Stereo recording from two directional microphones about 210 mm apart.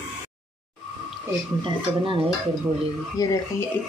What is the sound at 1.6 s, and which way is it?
Speech, 25° right (ahead or behind).